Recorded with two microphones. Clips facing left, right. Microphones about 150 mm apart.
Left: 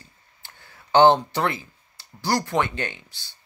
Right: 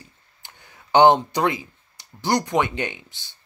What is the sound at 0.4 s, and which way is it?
Speech, 20° right (ahead or behind).